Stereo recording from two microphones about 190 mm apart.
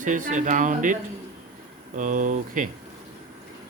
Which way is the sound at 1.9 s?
45° right (ahead or behind).